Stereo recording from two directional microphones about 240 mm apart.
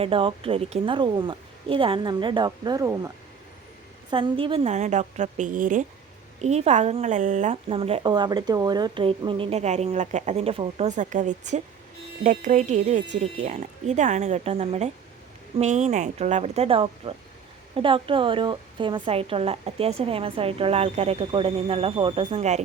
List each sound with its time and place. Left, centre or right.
0.0 s speech: right
4.1 s speech: right